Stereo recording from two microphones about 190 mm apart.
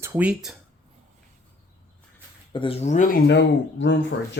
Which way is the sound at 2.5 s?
30° left (ahead or behind).